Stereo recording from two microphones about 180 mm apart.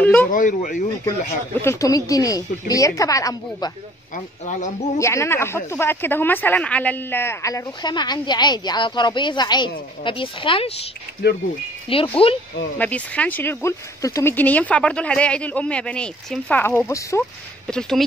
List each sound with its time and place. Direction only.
0.0 s speech: 10° left (ahead or behind)
0.3 s speech: 45° left (ahead or behind)
1.0 s speech: 15° left (ahead or behind)
4.9 s speech: 15° left (ahead or behind)
11.9 s speech: 30° left (ahead or behind)
12.7 s speech: 10° left (ahead or behind)
17.6 s speech: 5° left (ahead or behind)